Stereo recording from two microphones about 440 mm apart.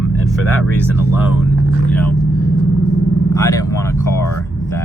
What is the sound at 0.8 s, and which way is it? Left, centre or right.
Speech, centre.